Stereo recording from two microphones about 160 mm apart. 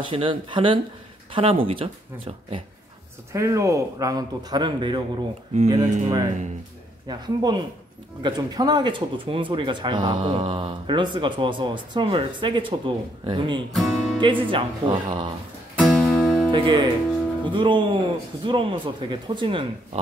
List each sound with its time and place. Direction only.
0.0 s speech: 30° right (ahead or behind)
3.3 s a man's voice: 20° right (ahead or behind)
13.7 s speech: centre (ahead or behind)
14.2 s speech: 30° right (ahead or behind)
15.8 s music: 5° left (ahead or behind)
16.5 s a man's voice: 30° right (ahead or behind)